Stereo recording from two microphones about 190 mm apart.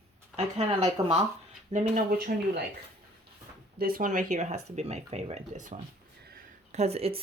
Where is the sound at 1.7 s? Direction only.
50° right (ahead or behind).